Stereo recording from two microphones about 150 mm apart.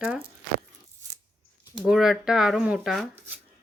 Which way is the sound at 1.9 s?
5° right (ahead or behind).